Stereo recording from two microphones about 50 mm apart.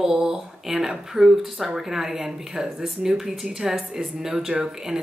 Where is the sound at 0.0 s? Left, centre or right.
Centre.